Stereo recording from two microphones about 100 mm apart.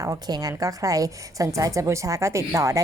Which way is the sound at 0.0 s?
35° right (ahead or behind).